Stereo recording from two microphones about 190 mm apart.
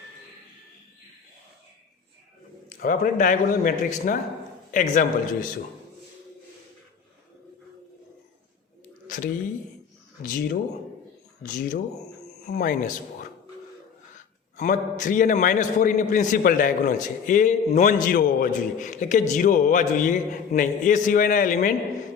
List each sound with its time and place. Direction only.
2.6 s a man's voice: 45° left (ahead or behind)
9.0 s a sound: 45° left (ahead or behind)
11.4 s a man's voice: 45° left (ahead or behind)
14.5 s a man's voice: 40° left (ahead or behind)